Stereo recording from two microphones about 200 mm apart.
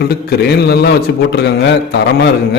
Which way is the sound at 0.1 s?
55° left (ahead or behind).